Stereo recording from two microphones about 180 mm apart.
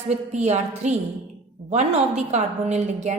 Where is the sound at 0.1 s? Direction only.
40° right (ahead or behind).